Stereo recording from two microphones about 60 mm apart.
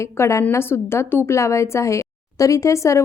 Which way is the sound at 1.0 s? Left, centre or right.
Left.